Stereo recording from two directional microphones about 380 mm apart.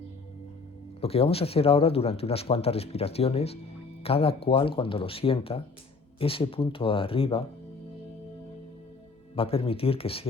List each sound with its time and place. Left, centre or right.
1.0 s speech: centre
9.3 s speech: centre